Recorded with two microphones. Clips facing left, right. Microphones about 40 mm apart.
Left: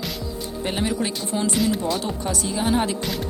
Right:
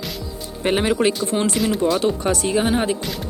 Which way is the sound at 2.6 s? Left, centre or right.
Centre.